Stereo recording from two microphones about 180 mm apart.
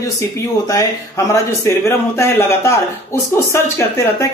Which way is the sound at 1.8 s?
15° left (ahead or behind).